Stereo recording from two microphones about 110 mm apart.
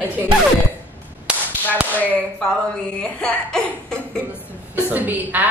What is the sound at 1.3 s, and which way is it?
Whip, 10° right (ahead or behind).